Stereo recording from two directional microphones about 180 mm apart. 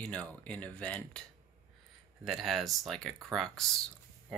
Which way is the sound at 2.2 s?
Centre (ahead or behind).